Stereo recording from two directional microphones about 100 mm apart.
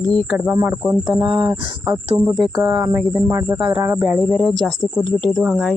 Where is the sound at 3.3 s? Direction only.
30° right (ahead or behind).